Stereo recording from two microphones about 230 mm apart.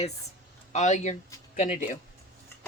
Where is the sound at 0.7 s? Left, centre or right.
Left.